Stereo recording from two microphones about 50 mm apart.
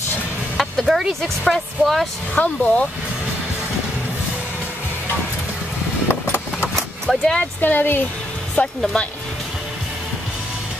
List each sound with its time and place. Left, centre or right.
0.8 s speech: centre
1.4 s a woman's voice: centre
2.3 s speech: left
6.0 s vehicle: left
6.7 s vehicle: centre
7.3 s speech: left
9.0 s a woman's voice: centre